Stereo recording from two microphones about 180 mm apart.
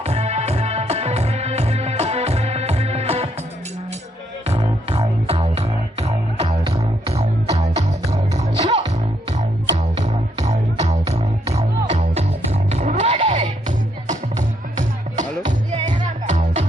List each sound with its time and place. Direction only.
0.0 s music: 35° right (ahead or behind)
4.4 s music: 35° right (ahead or behind)